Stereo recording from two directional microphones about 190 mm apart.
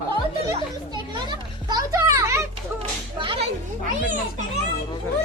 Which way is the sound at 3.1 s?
25° right (ahead or behind).